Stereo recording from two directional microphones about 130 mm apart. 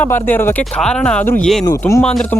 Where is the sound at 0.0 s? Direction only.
15° left (ahead or behind).